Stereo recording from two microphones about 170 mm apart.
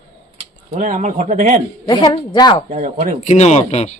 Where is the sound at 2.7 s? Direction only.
40° right (ahead or behind).